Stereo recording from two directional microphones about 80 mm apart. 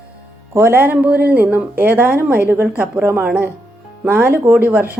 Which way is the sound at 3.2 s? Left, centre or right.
Centre.